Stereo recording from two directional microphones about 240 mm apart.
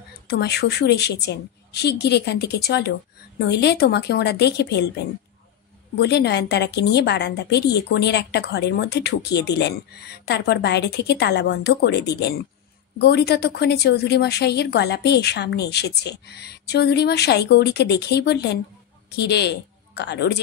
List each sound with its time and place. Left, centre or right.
0.3 s a woman's voice: left
5.9 s a woman's voice: left